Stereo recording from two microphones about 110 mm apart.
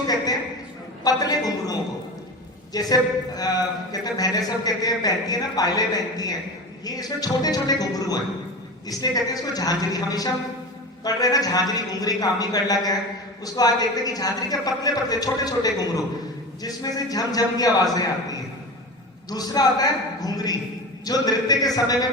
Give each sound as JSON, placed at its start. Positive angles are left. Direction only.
{"t": 1.0, "sound": "a man's voice", "side_deg": 35}